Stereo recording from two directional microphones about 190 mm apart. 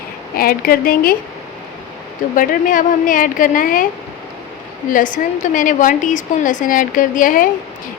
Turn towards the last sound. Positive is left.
turn(degrees=45)  # may be behind; listen again after turning